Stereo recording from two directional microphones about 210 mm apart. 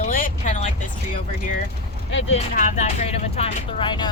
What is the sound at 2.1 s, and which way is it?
Speech, 60° left (ahead or behind).